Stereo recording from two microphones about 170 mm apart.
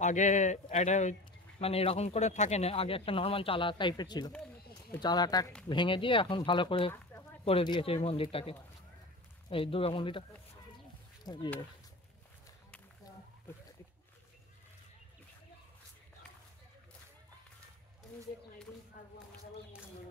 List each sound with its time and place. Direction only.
0.0 s speech: 45° left (ahead or behind); by 10.2 s 30° left (ahead or behind)
11.3 s speech: 20° left (ahead or behind)